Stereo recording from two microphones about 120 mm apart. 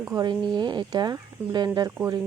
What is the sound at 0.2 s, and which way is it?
Speech, 40° right (ahead or behind).